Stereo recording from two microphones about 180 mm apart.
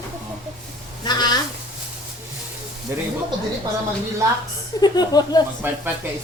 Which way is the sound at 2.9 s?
15° right (ahead or behind).